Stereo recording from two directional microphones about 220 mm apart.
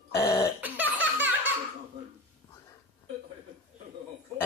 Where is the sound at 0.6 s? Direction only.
10° right (ahead or behind).